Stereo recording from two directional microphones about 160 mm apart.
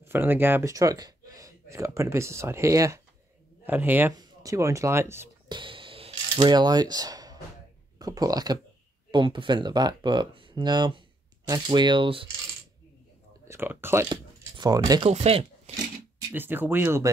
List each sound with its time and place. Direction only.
0.0 s speech: 15° right (ahead or behind)
4.1 s speech: 25° right (ahead or behind)
5.5 s camera: 30° right (ahead or behind)
8.0 s speech: 25° right (ahead or behind)
13.5 s speech: 15° right (ahead or behind)
14.0 s speech: 25° right (ahead or behind)
15.0 s speech: 40° right (ahead or behind)
16.3 s speech: 10° right (ahead or behind)